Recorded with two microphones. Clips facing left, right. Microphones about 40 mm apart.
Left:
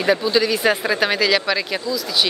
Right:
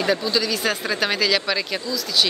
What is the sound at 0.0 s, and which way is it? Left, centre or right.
Speech, centre.